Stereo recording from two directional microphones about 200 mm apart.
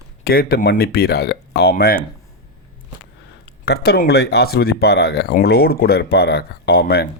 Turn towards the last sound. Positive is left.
turn(degrees=50)  # may be behind; listen again after turning